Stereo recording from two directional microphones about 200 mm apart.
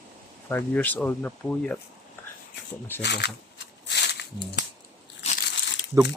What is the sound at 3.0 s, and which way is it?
Speech, 55° left (ahead or behind).